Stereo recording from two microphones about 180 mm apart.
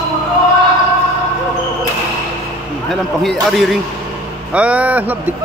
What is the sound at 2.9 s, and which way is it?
A man's voice, centre (ahead or behind).